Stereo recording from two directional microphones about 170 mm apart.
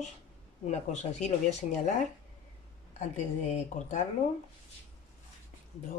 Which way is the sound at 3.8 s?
45° left (ahead or behind).